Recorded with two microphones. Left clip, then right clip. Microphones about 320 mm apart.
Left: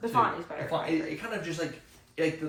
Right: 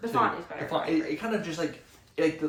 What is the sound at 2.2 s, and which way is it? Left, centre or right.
Speech, centre.